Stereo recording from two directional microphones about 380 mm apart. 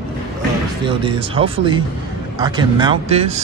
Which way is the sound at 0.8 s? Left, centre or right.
Centre.